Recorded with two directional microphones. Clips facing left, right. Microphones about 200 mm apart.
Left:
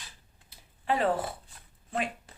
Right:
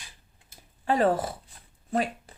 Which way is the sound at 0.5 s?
45° right (ahead or behind).